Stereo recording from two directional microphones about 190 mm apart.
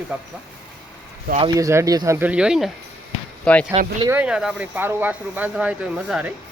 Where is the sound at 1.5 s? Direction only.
15° right (ahead or behind); by 3.7 s 5° left (ahead or behind).